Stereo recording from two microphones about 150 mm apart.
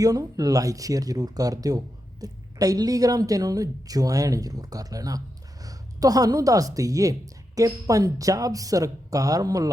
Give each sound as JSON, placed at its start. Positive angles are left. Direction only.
{"t": 0.0, "sound": "a woman's voice", "side_deg": -25}